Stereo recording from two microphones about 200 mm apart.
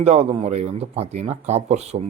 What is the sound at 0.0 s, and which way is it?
Speech, 30° right (ahead or behind).